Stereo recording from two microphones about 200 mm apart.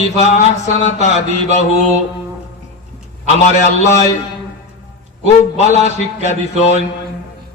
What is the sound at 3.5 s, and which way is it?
Speech, 35° left (ahead or behind).